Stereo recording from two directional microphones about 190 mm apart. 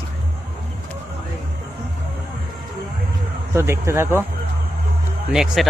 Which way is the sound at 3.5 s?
15° right (ahead or behind).